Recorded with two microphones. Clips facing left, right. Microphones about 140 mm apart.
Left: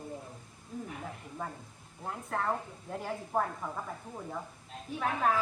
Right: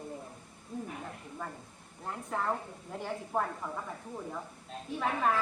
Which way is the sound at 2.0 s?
Centre (ahead or behind).